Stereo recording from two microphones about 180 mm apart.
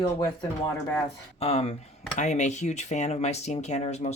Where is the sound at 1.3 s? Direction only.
35° left (ahead or behind).